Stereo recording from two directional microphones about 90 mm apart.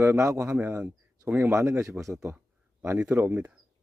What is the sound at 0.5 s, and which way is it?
Speech, 20° right (ahead or behind).